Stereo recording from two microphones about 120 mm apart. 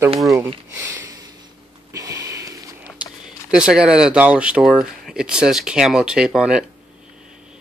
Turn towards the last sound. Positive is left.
turn(degrees=-5)  # may be behind; listen again after turning